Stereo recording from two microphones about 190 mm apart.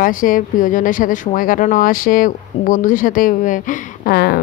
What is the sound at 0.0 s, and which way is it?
Speech, 45° left (ahead or behind).